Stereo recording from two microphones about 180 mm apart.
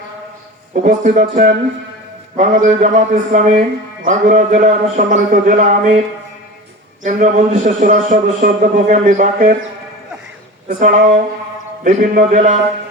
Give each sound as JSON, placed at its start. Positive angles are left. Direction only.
{"t": 0.7, "sound": "a man's voice", "side_deg": -40}
{"t": 7.0, "sound": "a man's voice", "side_deg": -45}
{"t": 10.7, "sound": "a man's voice", "side_deg": -45}